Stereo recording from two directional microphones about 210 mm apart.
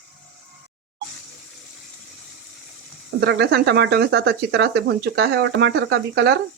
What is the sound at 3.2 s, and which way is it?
Speech, 55° right (ahead or behind).